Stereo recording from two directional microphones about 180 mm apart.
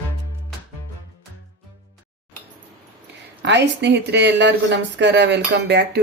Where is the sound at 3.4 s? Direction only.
75° right (ahead or behind).